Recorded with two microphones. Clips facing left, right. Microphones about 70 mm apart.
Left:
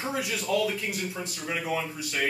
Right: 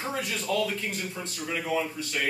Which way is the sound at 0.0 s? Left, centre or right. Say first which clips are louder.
Left 1 dB; centre.